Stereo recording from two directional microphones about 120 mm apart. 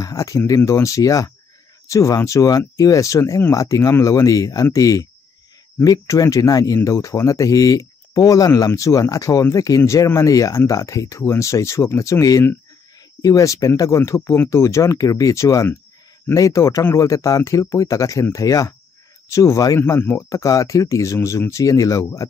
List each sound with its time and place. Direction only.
0.0 s speech: 30° left (ahead or behind)